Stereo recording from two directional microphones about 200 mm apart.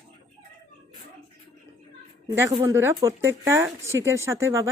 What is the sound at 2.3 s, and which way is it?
Speech, 15° right (ahead or behind).